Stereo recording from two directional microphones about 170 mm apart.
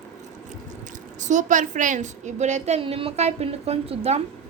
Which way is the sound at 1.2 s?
45° right (ahead or behind).